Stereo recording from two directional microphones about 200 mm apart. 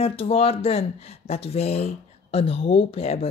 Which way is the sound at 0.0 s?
30° left (ahead or behind).